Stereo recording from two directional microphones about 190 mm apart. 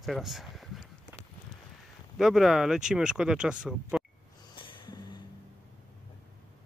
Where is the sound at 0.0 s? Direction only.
Centre (ahead or behind).